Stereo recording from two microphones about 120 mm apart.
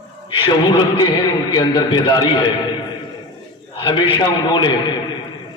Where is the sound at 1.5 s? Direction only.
40° left (ahead or behind).